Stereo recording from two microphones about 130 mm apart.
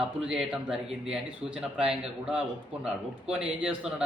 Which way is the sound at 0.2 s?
5° right (ahead or behind).